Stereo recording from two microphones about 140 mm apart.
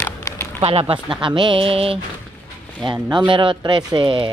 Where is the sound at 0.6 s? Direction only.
45° right (ahead or behind).